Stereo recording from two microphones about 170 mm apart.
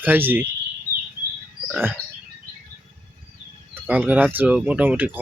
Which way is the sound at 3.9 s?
10° right (ahead or behind).